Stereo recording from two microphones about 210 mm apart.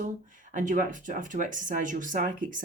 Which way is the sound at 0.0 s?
40° right (ahead or behind).